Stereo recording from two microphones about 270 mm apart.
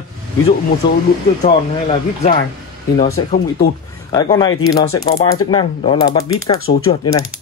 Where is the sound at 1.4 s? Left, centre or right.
Left.